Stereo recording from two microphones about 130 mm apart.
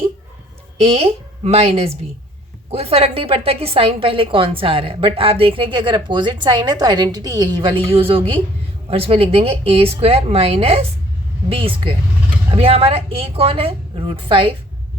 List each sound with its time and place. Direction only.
0.8 s a woman's voice: 50° right (ahead or behind)